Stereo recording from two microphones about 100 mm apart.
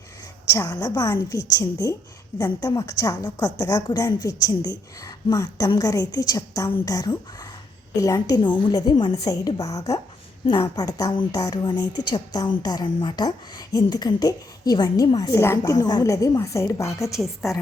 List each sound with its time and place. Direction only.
0.5 s speech: 35° left (ahead or behind)
8.4 s speech: 50° left (ahead or behind); by 17.5 s 30° left (ahead or behind)